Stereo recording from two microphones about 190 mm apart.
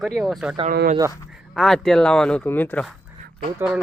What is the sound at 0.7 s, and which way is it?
Speech, 55° right (ahead or behind).